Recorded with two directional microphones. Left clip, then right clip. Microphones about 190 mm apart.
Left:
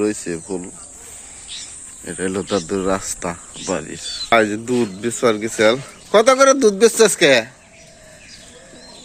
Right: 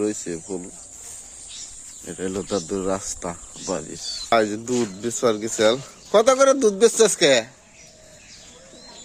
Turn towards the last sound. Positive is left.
turn(degrees=-5)  # may be behind; listen again after turning